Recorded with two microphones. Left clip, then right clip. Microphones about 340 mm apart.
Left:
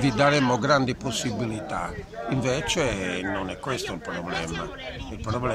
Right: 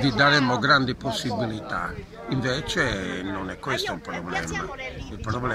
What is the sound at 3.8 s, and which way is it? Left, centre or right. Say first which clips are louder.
Speech: right 1 dB; centre.